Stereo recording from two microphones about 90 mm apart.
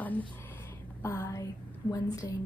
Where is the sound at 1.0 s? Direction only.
35° left (ahead or behind).